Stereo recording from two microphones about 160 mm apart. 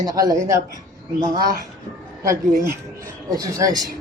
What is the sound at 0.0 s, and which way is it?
Speech, 20° right (ahead or behind).